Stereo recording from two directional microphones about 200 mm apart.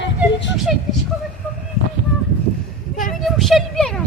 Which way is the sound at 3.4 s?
Centre (ahead or behind).